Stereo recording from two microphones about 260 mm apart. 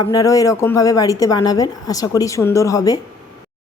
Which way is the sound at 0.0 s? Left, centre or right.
Centre.